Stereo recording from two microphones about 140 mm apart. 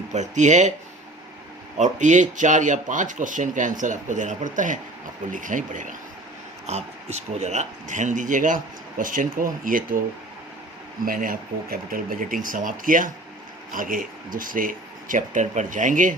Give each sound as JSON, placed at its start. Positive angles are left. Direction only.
{"t": 0.1, "sound": "speech", "side_deg": -55}
{"t": 1.8, "sound": "speech", "side_deg": -60}
{"t": 6.7, "sound": "speech", "side_deg": -50}
{"t": 11.0, "sound": "speech", "side_deg": -85}